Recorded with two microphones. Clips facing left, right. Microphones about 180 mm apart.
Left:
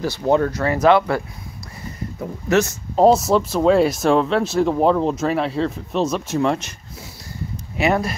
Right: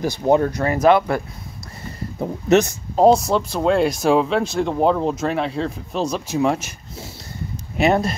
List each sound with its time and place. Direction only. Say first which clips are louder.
0.0 s speech: right 1 dB; 15° right (ahead or behind)
3.0 s speech: even; 5° left (ahead or behind)
7.7 s speech: right 2 dB; 20° right (ahead or behind)